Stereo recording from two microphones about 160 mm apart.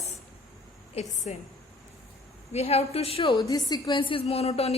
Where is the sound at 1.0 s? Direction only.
45° left (ahead or behind).